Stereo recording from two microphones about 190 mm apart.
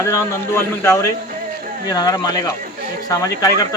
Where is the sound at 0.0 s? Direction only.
15° left (ahead or behind).